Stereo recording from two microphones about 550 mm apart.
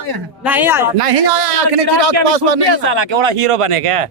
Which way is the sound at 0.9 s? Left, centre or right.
Right.